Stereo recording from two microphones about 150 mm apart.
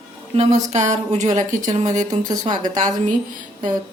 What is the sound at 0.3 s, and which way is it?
Speech, 50° right (ahead or behind).